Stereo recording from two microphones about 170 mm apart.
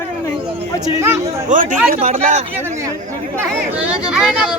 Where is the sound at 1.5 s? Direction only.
45° right (ahead or behind).